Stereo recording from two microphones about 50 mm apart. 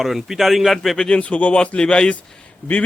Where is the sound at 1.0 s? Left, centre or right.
Left.